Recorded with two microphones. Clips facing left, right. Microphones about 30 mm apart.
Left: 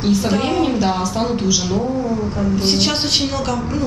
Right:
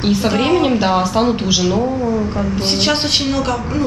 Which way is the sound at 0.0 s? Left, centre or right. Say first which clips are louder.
Right 2 dB; right.